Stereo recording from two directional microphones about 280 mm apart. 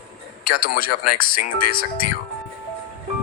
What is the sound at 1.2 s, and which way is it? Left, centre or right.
Speech, left.